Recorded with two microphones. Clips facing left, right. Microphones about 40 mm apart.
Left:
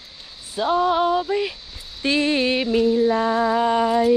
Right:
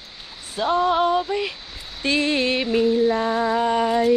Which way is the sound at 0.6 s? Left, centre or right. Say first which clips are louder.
Even; centre.